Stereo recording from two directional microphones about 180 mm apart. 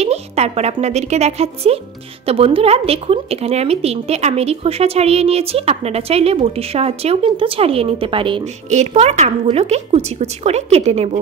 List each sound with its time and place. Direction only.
0.0 s a woman's voice: 35° right (ahead or behind)